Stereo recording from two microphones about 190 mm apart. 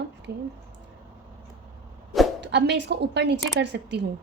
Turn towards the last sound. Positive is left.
turn(degrees=-65)  # may be behind; listen again after turning